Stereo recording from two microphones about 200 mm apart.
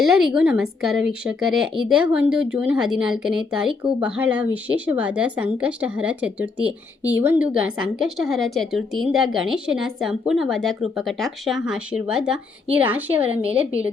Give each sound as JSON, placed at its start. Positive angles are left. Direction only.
{"t": 0.0, "sound": "a woman's voice", "side_deg": -5}